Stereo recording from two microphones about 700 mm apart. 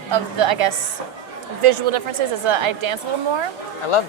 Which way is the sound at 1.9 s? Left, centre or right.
Right.